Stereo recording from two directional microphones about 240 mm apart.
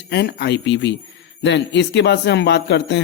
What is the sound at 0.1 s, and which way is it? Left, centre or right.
A man's voice, left.